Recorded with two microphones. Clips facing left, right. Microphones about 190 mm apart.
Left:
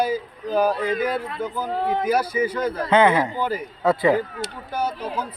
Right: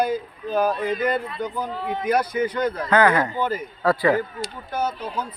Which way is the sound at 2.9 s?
25° left (ahead or behind).